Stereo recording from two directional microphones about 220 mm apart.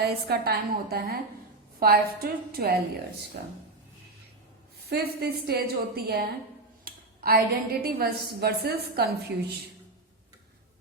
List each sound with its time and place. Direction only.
0.0 s a woman's voice: 45° right (ahead or behind)
4.9 s a woman's voice: 45° right (ahead or behind)